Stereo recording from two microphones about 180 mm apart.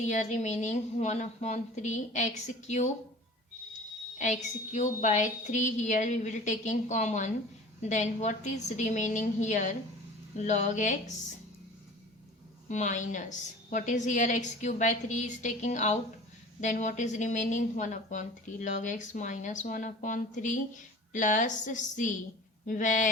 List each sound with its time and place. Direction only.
0.1 s a woman's voice: 40° left (ahead or behind)
4.2 s a woman's voice: 40° left (ahead or behind)
12.6 s speech: 40° left (ahead or behind)